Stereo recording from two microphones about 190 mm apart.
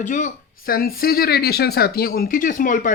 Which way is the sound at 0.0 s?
40° left (ahead or behind).